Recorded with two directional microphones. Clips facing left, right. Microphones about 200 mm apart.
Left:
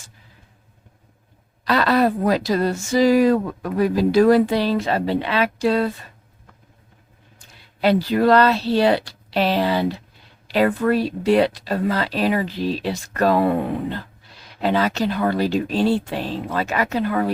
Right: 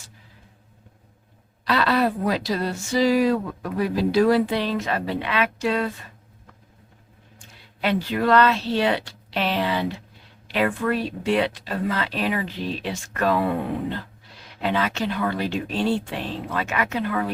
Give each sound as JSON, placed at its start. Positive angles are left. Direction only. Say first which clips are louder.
{"t": 1.6, "sound": "speech", "louder": "left 3 dB", "side_deg": 45}
{"t": 7.3, "sound": "speech", "louder": "left 4 dB", "side_deg": 35}
{"t": 14.6, "sound": "speech", "louder": "left 4 dB", "side_deg": 40}